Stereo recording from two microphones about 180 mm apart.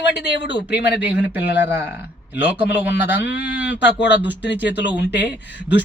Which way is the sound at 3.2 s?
75° left (ahead or behind).